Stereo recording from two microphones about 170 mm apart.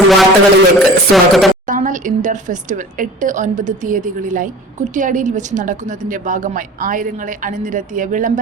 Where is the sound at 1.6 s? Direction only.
50° right (ahead or behind).